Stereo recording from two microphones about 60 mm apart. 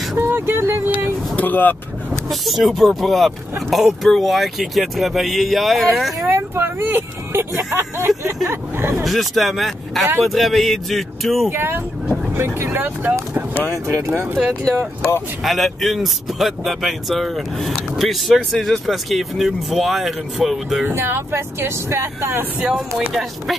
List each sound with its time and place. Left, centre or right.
0.2 s a sound: right
1.3 s speech: left
2.2 s speech: centre
6.2 s speech: right
9.0 s speech: centre
11.5 s speech: right
13.8 s speech: right
14.6 s speech: centre
20.9 s speech: right
22.6 s speech: centre